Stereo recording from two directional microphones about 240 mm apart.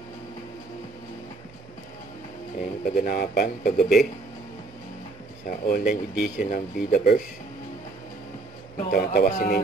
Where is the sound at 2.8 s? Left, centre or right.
Left.